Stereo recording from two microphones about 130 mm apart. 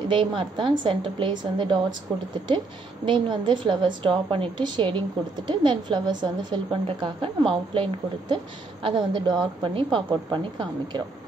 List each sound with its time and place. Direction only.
0.1 s a woman's voice: 40° right (ahead or behind)
3.1 s a woman's voice: 35° right (ahead or behind)